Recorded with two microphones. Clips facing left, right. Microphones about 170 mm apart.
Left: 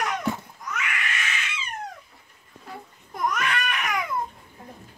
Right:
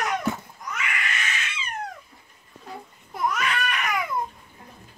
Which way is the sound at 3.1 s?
5° right (ahead or behind).